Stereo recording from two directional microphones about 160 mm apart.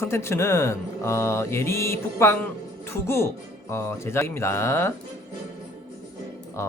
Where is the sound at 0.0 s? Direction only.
15° left (ahead or behind).